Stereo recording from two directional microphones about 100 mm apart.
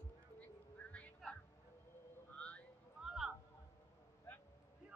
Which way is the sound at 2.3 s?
10° left (ahead or behind).